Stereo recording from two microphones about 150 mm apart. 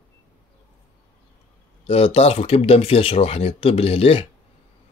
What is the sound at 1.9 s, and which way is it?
Speech, 40° left (ahead or behind).